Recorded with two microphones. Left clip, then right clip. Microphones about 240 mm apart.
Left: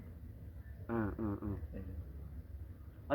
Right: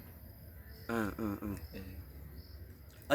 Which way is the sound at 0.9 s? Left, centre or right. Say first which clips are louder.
Right 2 dB; right.